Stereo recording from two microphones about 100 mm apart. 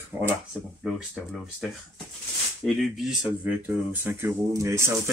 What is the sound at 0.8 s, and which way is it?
Speech, 5° right (ahead or behind).